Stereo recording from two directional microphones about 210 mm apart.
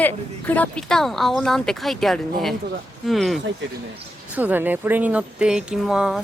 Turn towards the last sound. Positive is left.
turn(degrees=-5)  # may be behind; listen again after turning